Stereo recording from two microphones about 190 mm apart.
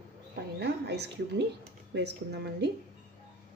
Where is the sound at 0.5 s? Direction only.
60° right (ahead or behind).